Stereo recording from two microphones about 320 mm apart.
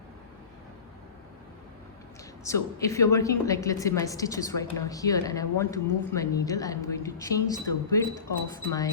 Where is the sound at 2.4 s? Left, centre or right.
Centre.